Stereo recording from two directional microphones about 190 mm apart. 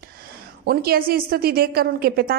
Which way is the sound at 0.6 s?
55° right (ahead or behind).